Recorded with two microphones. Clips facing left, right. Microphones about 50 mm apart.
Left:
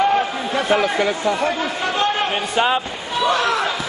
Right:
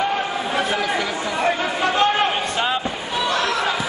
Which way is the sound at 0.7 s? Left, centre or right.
Centre.